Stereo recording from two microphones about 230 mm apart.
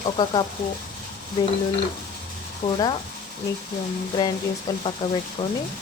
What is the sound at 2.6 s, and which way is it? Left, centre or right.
Speech, left.